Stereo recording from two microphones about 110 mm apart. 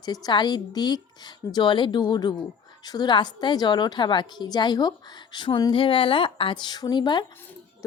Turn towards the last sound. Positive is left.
turn(degrees=45)  # may be behind; listen again after turning